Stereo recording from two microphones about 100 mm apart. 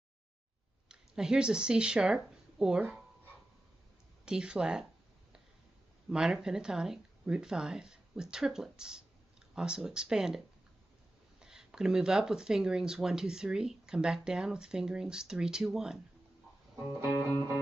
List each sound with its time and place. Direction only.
0.8 s speech: 5° right (ahead or behind)
4.3 s speech: 10° right (ahead or behind)
6.0 s speech: 5° right (ahead or behind)
11.4 s speech: 5° right (ahead or behind)
17.3 s music: 30° right (ahead or behind)